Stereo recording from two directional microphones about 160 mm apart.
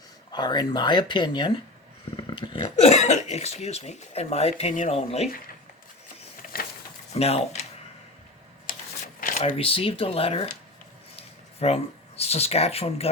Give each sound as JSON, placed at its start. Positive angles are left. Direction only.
{"t": 0.3, "sound": "speech", "side_deg": 25}
{"t": 6.5, "sound": "a sound", "side_deg": 70}
{"t": 7.1, "sound": "speech", "side_deg": 40}
{"t": 8.7, "sound": "shuffling cards", "side_deg": 60}
{"t": 9.2, "sound": "speech", "side_deg": 50}